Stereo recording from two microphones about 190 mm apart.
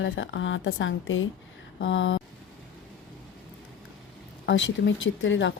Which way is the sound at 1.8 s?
75° left (ahead or behind).